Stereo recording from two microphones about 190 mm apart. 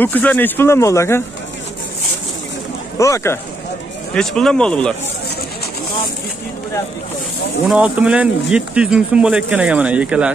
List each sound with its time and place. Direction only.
0.0 s speech: 10° left (ahead or behind)
3.0 s speech: 15° left (ahead or behind)
4.1 s speech: 5° left (ahead or behind)
7.6 s speech: 5° right (ahead or behind)